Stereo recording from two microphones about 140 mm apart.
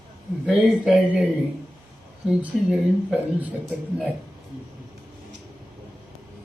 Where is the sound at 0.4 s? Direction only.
Centre (ahead or behind).